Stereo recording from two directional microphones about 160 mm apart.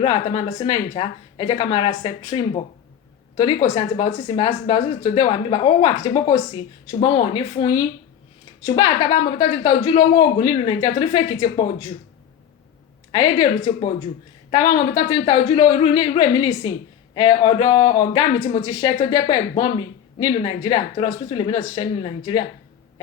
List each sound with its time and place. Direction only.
0.0 s speech: 35° left (ahead or behind)
13.1 s speech: 30° left (ahead or behind)